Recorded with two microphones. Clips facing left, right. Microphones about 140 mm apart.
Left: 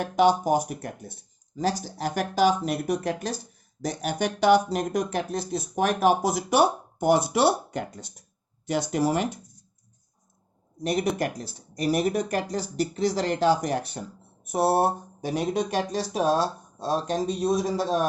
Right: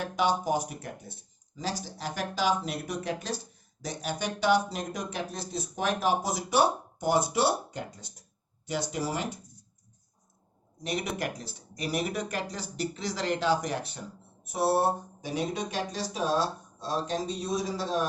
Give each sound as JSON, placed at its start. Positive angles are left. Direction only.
{"t": 0.0, "sound": "speech", "side_deg": 45}
{"t": 7.0, "sound": "speech", "side_deg": 65}
{"t": 8.6, "sound": "speech", "side_deg": 50}
{"t": 10.8, "sound": "speech", "side_deg": 40}